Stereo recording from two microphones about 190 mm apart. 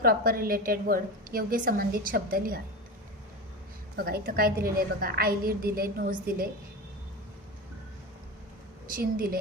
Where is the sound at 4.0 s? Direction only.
50° right (ahead or behind).